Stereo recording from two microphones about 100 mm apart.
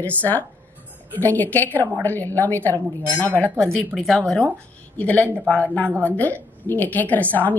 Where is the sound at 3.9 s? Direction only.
5° left (ahead or behind).